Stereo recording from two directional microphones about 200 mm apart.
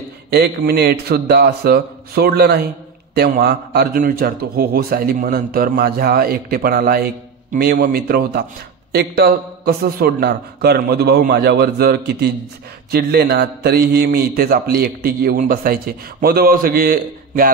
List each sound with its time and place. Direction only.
0.3 s a man's voice: 50° right (ahead or behind)